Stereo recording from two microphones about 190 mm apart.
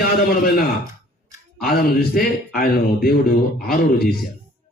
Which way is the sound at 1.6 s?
55° left (ahead or behind).